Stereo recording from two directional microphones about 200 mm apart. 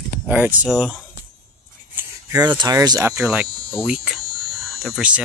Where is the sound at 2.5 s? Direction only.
20° right (ahead or behind).